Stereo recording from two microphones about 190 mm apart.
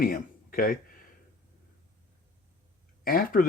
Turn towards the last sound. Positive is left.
turn(degrees=45)  # may be behind; listen again after turning